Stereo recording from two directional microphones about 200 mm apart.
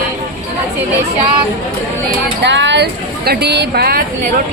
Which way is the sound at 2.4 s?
60° right (ahead or behind).